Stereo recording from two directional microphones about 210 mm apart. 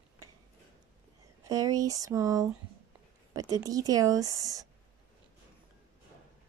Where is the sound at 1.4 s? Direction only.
15° right (ahead or behind).